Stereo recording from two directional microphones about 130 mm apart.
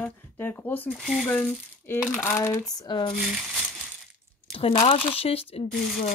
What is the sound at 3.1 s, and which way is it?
Speech, centre (ahead or behind).